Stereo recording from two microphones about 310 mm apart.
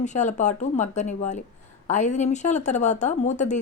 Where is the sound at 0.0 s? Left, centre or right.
Left.